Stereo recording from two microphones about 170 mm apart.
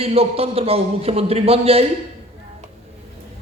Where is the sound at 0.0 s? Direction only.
35° right (ahead or behind).